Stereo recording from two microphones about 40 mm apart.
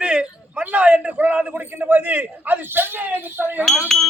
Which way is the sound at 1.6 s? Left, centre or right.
Right.